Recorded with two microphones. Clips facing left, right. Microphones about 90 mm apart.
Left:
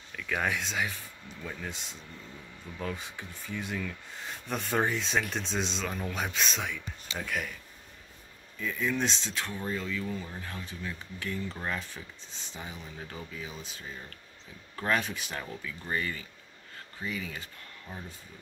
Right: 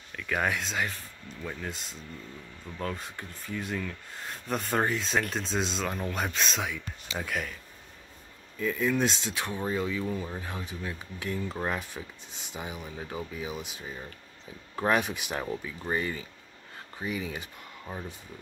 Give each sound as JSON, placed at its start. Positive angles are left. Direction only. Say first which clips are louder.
{"t": 0.1, "sound": "speech", "louder": "right 2 dB", "side_deg": 0}
{"t": 8.5, "sound": "speech", "louder": "right 4 dB", "side_deg": -5}